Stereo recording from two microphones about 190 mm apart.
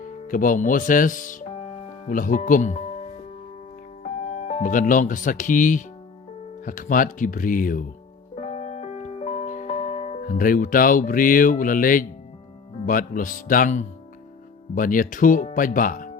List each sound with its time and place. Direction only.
0.0 s speech: 45° left (ahead or behind)
4.4 s speech: 35° left (ahead or behind)
8.4 s music: 35° left (ahead or behind)
12.8 s speech: 45° left (ahead or behind)